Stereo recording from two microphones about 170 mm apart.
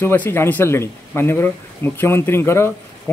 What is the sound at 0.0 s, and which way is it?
A man's voice, 10° left (ahead or behind).